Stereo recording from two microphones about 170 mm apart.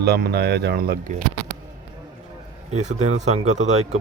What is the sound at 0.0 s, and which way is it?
Speech, 70° right (ahead or behind).